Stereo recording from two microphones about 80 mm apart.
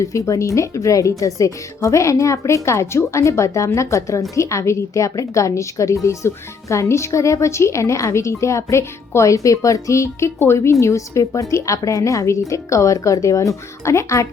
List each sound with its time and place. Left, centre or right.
0.0 s a woman's voice: left